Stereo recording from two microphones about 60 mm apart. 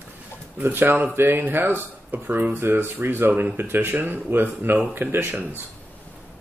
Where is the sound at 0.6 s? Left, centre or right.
Right.